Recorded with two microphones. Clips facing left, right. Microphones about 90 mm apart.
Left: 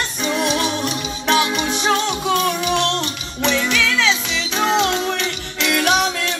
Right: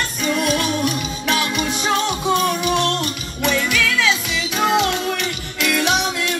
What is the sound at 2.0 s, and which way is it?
Music, 10° right (ahead or behind).